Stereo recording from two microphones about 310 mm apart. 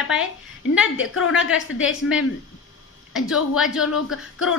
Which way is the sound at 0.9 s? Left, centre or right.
Left.